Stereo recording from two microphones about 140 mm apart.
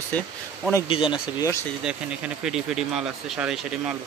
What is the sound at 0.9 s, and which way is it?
Speech, 35° left (ahead or behind).